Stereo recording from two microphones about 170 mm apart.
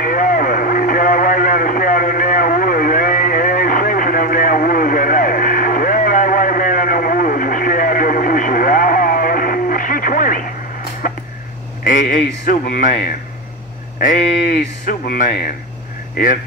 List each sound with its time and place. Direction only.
0.0 s radio: 55° left (ahead or behind)
11.8 s a sound: 50° left (ahead or behind)
14.9 s speech: 55° left (ahead or behind)